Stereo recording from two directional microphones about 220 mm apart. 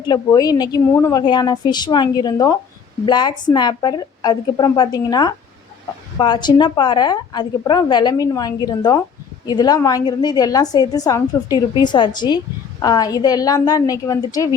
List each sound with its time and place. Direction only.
0.0 s a woman's voice: 15° left (ahead or behind)